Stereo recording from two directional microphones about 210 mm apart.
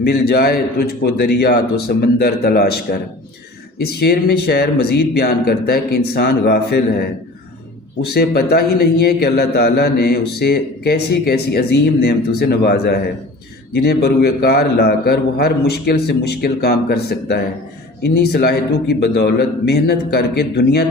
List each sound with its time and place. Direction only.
0.0 s a man's voice: 45° left (ahead or behind)
8.0 s a man's voice: 50° left (ahead or behind)